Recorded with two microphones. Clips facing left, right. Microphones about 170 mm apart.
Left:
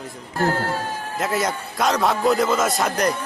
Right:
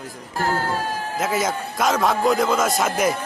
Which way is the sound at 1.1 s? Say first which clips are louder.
Even; centre (ahead or behind).